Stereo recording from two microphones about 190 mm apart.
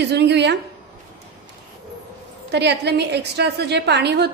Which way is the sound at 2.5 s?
60° right (ahead or behind).